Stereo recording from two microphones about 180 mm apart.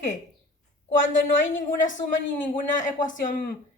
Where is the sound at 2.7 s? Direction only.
45° left (ahead or behind).